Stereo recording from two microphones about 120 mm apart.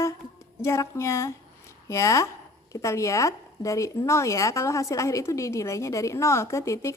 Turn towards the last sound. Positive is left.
turn(degrees=25)  # may be behind; listen again after turning